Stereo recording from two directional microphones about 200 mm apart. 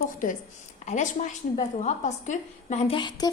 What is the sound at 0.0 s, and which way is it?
A woman's voice, 40° left (ahead or behind).